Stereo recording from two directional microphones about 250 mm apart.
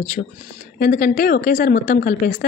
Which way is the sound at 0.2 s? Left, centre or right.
Left.